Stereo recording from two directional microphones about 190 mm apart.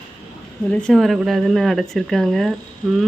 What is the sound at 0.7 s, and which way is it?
Speech, 5° left (ahead or behind).